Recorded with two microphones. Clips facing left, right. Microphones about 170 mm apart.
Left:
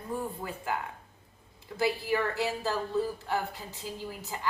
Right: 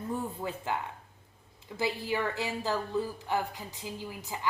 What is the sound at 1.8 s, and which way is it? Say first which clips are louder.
A woman's voice: left 2 dB; 15° right (ahead or behind).